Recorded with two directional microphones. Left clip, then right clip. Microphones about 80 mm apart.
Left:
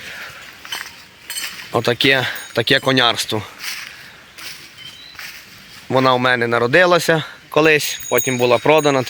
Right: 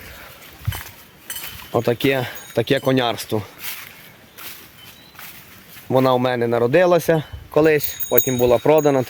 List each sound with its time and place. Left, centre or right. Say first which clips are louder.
1.7 s speech: left 4 dB; centre
3.3 s a sound: left 2 dB; centre
5.9 s a man's voice: left 3 dB; centre